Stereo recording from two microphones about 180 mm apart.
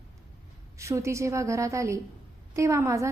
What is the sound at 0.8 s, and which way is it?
A woman's voice, 15° right (ahead or behind).